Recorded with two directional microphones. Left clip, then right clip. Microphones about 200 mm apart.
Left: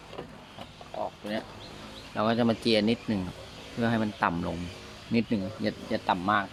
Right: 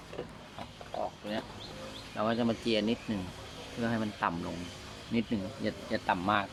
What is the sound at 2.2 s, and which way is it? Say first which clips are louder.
Speech: left 5 dB; 40° left (ahead or behind).